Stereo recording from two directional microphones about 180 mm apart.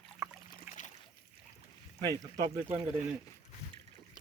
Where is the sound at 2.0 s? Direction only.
20° right (ahead or behind).